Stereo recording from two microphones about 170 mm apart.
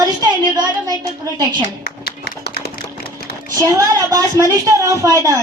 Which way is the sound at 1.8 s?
70° left (ahead or behind).